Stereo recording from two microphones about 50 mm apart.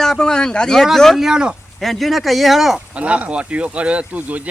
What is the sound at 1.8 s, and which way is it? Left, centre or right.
Speech, centre.